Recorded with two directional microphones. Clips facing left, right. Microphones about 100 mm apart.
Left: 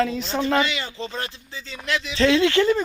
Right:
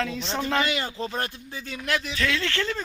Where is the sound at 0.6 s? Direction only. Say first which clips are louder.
Right 1 dB; 45° right (ahead or behind).